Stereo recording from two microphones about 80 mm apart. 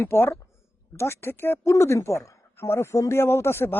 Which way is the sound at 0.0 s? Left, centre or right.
Left.